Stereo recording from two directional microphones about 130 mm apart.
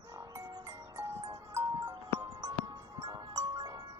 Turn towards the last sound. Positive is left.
turn(degrees=-30)  # may be behind; listen again after turning